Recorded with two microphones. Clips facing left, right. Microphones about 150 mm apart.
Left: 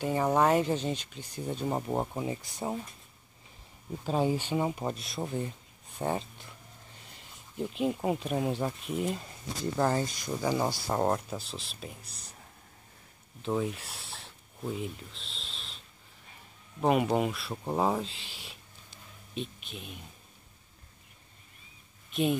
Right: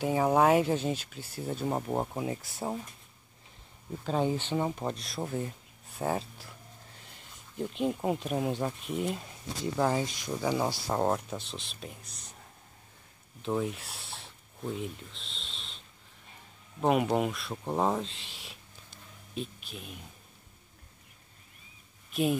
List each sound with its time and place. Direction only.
0.0 s speech: 10° right (ahead or behind)
3.9 s speech: 10° left (ahead or behind)
13.4 s speech: centre (ahead or behind)
16.8 s speech: centre (ahead or behind)
22.1 s speech: 5° right (ahead or behind)